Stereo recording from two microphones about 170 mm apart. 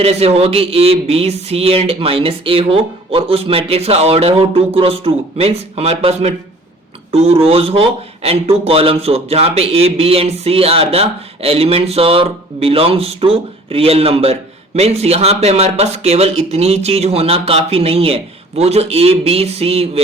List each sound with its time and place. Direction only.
0.0 s speech: 35° right (ahead or behind)